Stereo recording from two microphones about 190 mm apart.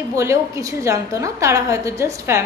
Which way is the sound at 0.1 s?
15° right (ahead or behind).